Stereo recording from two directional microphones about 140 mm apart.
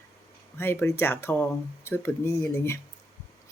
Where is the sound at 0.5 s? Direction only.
15° left (ahead or behind).